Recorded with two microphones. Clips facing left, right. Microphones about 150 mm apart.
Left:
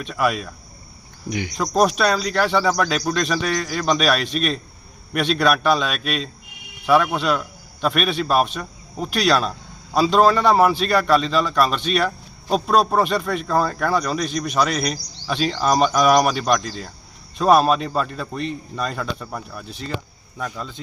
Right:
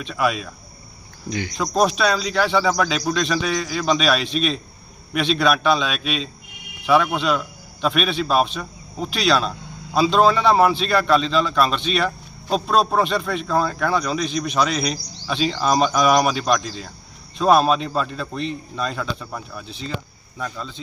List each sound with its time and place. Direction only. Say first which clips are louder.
0.1 s a man's voice: even; centre (ahead or behind)
1.3 s a man's voice: left 1 dB; 15° left (ahead or behind)
19.6 s speech: even; 50° left (ahead or behind)
20.4 s a man's voice: left 1 dB; 10° left (ahead or behind)